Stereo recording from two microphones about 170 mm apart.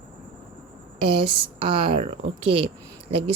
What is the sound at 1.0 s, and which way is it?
Speech, 30° right (ahead or behind).